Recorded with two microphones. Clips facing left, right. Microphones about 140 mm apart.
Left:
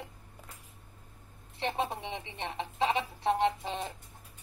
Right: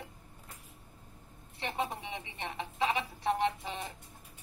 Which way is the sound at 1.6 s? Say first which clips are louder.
Left 3 dB; 25° left (ahead or behind).